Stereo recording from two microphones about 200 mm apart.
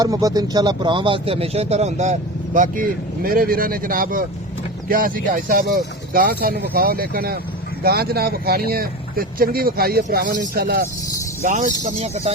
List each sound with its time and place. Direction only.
0.0 s speech: 20° right (ahead or behind); by 10.8 s 50° right (ahead or behind)
11.4 s speech: 40° right (ahead or behind)